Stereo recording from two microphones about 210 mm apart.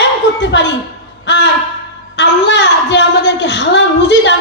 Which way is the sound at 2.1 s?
55° left (ahead or behind).